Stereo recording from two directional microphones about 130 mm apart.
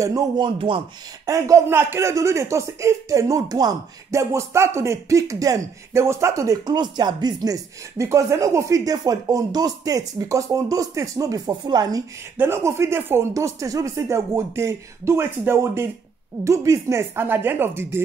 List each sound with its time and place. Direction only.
0.0 s speech: 30° right (ahead or behind)
0.6 s speech: 40° right (ahead or behind)
1.2 s speech: 25° right (ahead or behind)
12.4 s speech: 20° right (ahead or behind)